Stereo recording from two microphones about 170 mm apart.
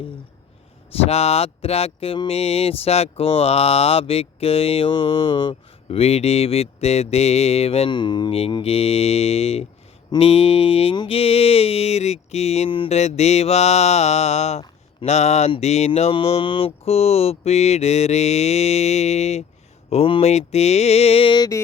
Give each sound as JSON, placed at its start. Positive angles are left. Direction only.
{"t": 1.0, "sound": "speech", "side_deg": 35}